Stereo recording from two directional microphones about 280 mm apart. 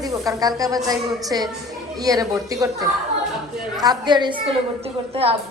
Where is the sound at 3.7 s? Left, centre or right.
Centre.